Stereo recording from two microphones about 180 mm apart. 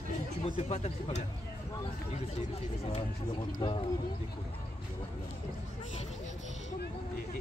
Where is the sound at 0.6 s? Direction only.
35° left (ahead or behind).